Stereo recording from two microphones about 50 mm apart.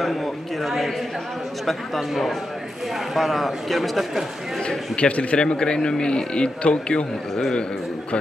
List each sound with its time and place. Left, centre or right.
0.0 s a man's voice: centre
4.6 s a man's voice: left